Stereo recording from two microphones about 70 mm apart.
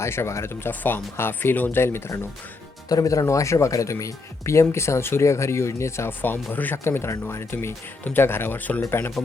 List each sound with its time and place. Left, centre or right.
0.0 s speech: left
2.9 s speech: left
6.1 s speech: left
8.8 s speech: left